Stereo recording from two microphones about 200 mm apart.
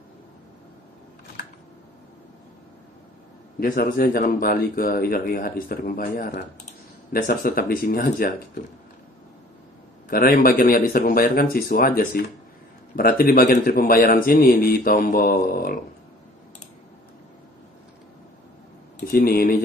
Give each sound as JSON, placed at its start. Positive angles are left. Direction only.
{"t": 3.5, "sound": "speech", "side_deg": 45}
{"t": 10.0, "sound": "speech", "side_deg": 45}
{"t": 18.9, "sound": "speech", "side_deg": 45}